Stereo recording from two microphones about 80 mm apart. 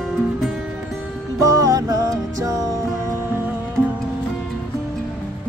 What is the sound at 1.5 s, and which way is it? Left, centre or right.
Music, right.